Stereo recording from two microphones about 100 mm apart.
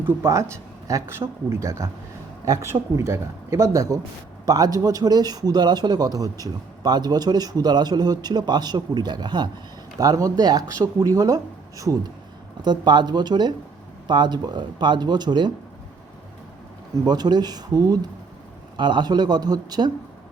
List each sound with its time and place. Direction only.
0.0 s a man's voice: 25° right (ahead or behind)
12.6 s a man's voice: 50° right (ahead or behind)
17.1 s a man's voice: 45° right (ahead or behind)